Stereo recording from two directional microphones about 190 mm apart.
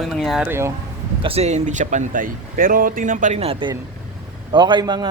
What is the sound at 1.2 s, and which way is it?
Speech, 35° right (ahead or behind).